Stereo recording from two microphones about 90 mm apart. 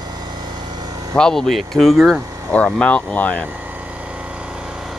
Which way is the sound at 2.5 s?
15° left (ahead or behind).